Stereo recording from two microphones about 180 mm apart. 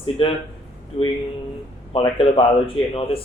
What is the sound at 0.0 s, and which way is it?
Speech, 30° left (ahead or behind).